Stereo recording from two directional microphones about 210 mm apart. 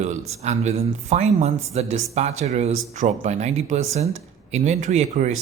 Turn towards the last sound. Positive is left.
turn(degrees=-35)  # may be behind; listen again after turning